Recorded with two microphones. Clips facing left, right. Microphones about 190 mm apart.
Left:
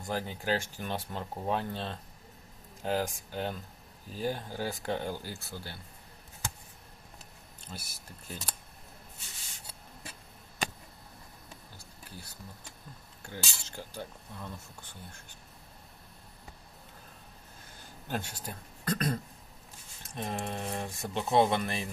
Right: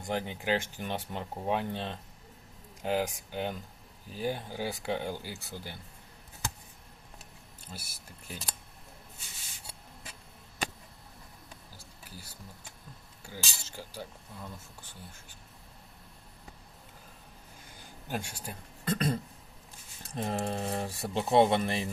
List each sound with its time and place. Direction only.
0.0 s speech: 20° right (ahead or behind)
7.7 s speech: 10° right (ahead or behind)
13.2 s speech: 5° right (ahead or behind)
18.1 s speech: 10° right (ahead or behind)
18.9 s a sound: 25° right (ahead or behind)
20.1 s speech: 30° right (ahead or behind)
21.5 s a sound: 30° right (ahead or behind)